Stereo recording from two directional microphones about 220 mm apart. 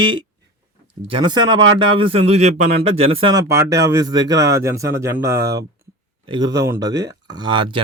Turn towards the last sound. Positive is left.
turn(degrees=-20)  # may be behind; listen again after turning